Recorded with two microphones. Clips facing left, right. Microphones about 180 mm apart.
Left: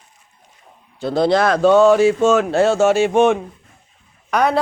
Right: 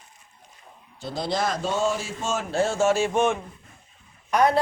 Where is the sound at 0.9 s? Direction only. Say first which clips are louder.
Left 11 dB; 65° left (ahead or behind).